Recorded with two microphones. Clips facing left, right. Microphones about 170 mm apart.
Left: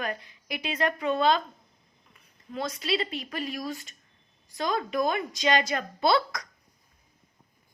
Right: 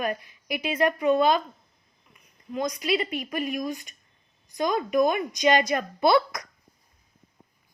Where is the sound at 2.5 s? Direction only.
15° right (ahead or behind).